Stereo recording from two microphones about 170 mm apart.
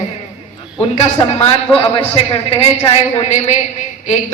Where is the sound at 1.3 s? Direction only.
35° left (ahead or behind).